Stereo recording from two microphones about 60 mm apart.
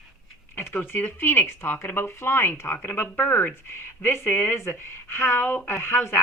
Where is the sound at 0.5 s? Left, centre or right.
Left.